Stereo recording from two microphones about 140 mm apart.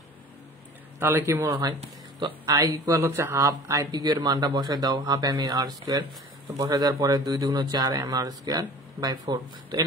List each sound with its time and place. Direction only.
0.9 s a man's voice: 15° right (ahead or behind)
1.6 s speech: 30° right (ahead or behind)